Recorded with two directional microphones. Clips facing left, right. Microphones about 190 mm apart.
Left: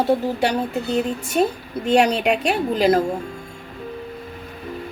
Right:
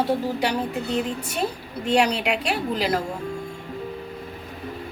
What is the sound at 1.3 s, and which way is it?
A woman's voice, 40° left (ahead or behind).